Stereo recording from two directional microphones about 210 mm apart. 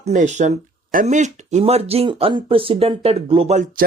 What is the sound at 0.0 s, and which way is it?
Speech, 35° right (ahead or behind).